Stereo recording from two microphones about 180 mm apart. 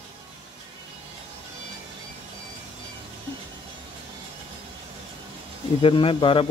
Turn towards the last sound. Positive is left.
turn(degrees=30)  # may be behind; listen again after turning